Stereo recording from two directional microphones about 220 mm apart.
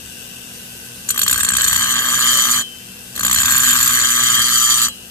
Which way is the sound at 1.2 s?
10° left (ahead or behind).